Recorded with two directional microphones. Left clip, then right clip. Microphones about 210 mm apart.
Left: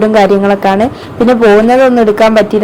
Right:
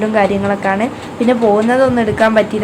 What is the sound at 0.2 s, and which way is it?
Speech, 25° left (ahead or behind).